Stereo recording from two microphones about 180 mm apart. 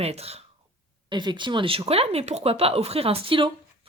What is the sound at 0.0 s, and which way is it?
A woman's voice, 35° right (ahead or behind).